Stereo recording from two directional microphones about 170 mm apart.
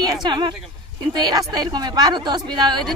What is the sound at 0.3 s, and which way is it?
Speech, 30° right (ahead or behind).